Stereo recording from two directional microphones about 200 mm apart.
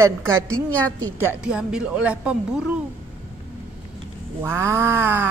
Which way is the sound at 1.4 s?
5° right (ahead or behind).